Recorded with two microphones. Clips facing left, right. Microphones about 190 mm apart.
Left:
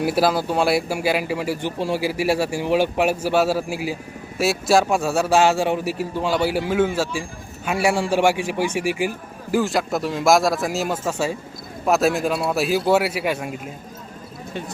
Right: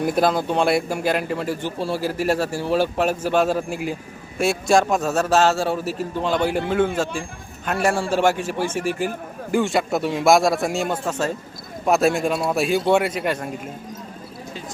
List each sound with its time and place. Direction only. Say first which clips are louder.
0.0 s a man's voice: even; 5° left (ahead or behind)